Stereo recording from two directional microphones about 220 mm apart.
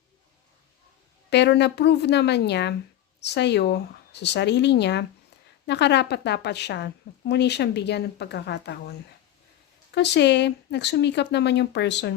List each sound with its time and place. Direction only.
1.3 s speech: 50° left (ahead or behind)